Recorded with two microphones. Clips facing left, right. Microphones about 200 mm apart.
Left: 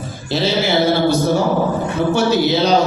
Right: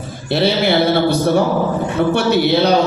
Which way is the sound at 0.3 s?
60° right (ahead or behind).